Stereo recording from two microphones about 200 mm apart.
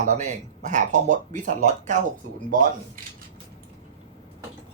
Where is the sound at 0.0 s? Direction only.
35° right (ahead or behind).